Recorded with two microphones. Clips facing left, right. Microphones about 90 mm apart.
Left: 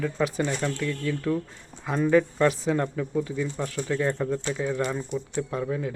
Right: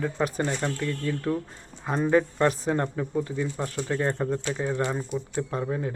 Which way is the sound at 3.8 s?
30° right (ahead or behind).